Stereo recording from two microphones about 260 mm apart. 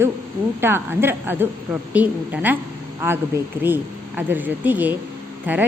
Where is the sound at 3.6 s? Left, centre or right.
Centre.